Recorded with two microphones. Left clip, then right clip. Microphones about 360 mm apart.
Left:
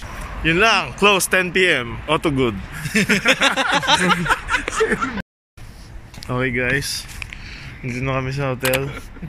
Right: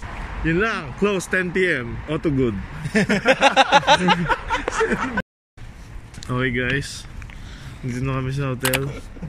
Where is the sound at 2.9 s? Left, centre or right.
Right.